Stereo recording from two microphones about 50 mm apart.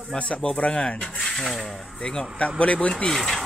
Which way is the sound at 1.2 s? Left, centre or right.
Centre.